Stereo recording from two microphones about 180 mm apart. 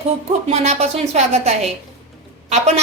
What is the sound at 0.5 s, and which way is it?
A woman's voice, 35° right (ahead or behind).